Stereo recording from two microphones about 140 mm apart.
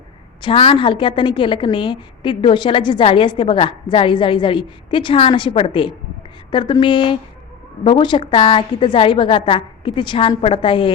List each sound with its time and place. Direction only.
0.4 s a woman's voice: 35° left (ahead or behind)